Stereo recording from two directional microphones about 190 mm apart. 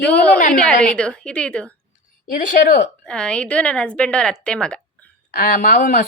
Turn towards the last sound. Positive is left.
turn(degrees=45)  # may be behind; listen again after turning